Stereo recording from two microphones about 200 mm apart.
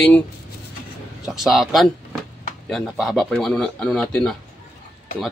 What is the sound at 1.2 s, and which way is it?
Speech, centre (ahead or behind).